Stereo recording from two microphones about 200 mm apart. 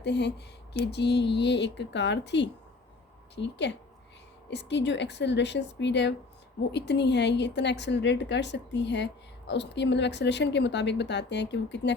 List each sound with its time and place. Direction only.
0.0 s speech: 60° left (ahead or behind)